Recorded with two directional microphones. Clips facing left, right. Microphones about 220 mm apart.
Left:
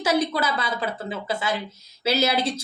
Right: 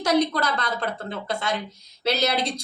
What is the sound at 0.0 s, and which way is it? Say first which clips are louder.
A woman's voice: right 1 dB; 5° left (ahead or behind).